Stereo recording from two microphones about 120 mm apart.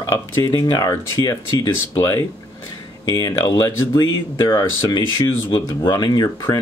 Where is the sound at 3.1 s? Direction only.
35° left (ahead or behind).